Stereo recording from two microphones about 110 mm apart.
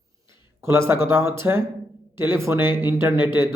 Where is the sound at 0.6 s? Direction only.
25° right (ahead or behind).